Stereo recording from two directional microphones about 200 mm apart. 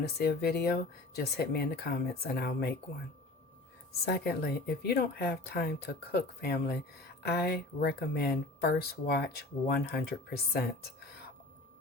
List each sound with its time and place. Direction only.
0.2 s speech: 55° left (ahead or behind)
4.0 s speech: 55° left (ahead or behind)